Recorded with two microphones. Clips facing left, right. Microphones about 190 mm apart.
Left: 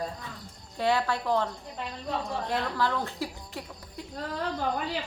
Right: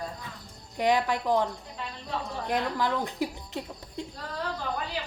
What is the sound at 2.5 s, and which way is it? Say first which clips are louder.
A woman's voice: right 2 dB; 15° right (ahead or behind).